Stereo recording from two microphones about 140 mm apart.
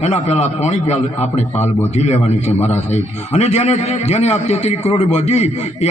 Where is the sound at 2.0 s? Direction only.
50° left (ahead or behind).